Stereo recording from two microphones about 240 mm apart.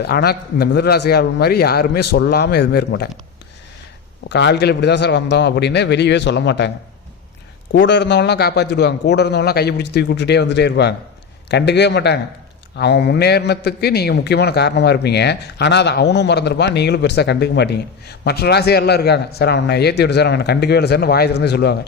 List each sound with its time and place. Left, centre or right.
0.0 s a man's voice: left
4.3 s a man's voice: left
7.7 s a man's voice: left